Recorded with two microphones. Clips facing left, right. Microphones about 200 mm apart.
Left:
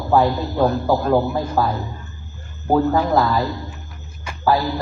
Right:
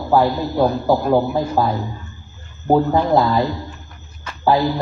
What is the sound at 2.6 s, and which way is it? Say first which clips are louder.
Speech: right 2 dB; 15° right (ahead or behind).